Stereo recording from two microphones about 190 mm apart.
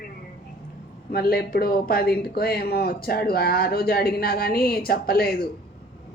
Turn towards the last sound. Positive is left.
turn(degrees=50)  # may be behind; listen again after turning